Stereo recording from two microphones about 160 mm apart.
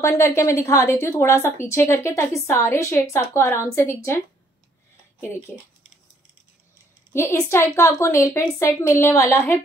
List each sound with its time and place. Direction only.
0.0 s speech: 15° left (ahead or behind)
7.1 s speech: 15° left (ahead or behind)